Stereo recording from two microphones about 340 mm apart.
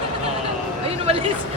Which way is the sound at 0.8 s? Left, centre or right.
Centre.